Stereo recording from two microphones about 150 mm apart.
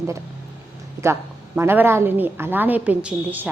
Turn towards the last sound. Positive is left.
turn(degrees=-10)  # may be behind; listen again after turning